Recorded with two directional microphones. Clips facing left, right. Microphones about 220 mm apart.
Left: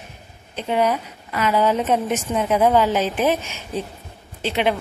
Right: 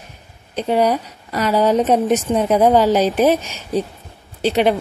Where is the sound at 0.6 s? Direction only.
35° right (ahead or behind).